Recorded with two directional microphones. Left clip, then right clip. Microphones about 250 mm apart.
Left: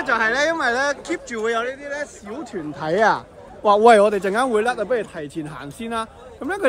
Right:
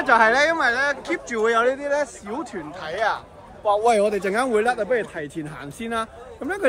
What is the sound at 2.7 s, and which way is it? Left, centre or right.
Speech, left.